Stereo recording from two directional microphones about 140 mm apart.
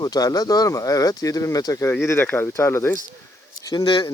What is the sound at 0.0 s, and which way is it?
Speech, 25° left (ahead or behind).